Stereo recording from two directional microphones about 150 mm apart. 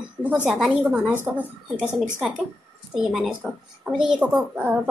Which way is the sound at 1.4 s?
10° left (ahead or behind).